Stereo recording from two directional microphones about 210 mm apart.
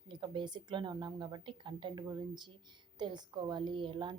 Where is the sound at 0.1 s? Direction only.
20° right (ahead or behind).